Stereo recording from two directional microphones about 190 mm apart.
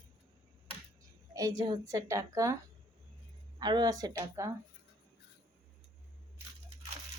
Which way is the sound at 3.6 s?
20° right (ahead or behind).